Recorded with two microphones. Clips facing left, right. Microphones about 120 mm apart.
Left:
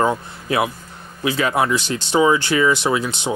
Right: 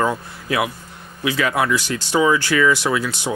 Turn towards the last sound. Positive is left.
turn(degrees=20)  # may be behind; listen again after turning